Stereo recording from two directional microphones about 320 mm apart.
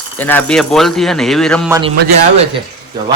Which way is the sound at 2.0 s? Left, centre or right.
Right.